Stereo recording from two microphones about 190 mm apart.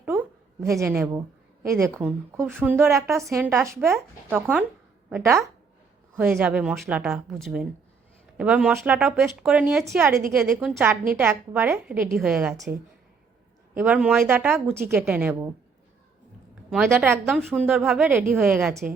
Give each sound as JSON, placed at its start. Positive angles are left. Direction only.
{"t": 0.0, "sound": "a sound", "side_deg": -10}
{"t": 1.6, "sound": "a woman's voice", "side_deg": -15}
{"t": 16.6, "sound": "a woman's voice", "side_deg": -5}